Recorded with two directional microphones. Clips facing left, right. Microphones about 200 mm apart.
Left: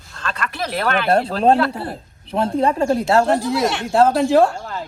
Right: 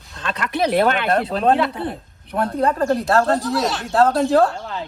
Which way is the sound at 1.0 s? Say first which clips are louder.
Left 2 dB; 30° left (ahead or behind).